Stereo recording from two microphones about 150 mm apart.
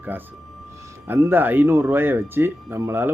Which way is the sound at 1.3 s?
10° right (ahead or behind).